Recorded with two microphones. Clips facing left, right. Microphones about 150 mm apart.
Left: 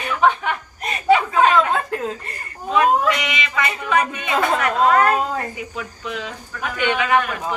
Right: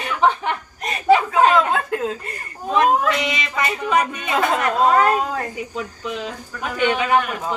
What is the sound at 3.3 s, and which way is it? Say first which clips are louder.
Speech: even; 35° right (ahead or behind).